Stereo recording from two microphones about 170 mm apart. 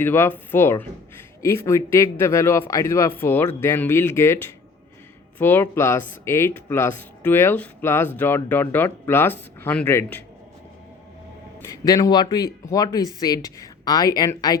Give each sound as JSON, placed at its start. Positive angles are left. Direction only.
{"t": 0.0, "sound": "speech", "side_deg": 15}
{"t": 11.6, "sound": "speech", "side_deg": 20}